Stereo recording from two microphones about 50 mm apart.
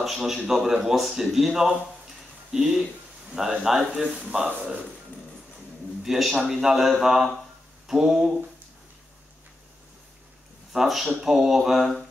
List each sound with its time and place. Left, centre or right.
0.0 s speech: centre
4.4 s speech: right
6.0 s a sound: centre
6.5 s speech: centre
10.7 s speech: centre
11.2 s a sound: centre